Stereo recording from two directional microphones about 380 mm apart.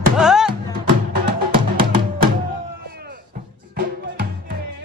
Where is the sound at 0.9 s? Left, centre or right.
Right.